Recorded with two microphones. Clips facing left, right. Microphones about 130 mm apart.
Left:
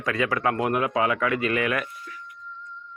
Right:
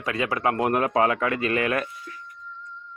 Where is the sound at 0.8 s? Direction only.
35° right (ahead or behind).